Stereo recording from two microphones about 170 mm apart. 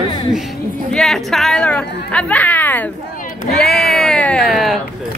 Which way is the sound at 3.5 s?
70° left (ahead or behind).